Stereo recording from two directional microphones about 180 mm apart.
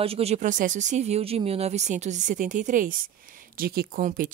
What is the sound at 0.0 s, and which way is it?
Speech, 35° right (ahead or behind).